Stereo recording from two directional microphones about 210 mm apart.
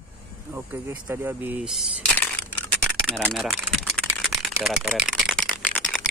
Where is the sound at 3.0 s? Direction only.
5° left (ahead or behind).